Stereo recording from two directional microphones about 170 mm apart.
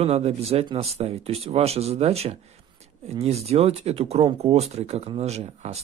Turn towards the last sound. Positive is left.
turn(degrees=-40)  # may be behind; listen again after turning